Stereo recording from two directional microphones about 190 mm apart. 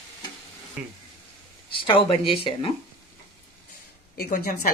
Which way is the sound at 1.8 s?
25° left (ahead or behind).